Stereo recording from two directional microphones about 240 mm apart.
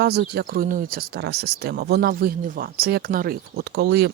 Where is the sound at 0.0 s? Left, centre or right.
Right.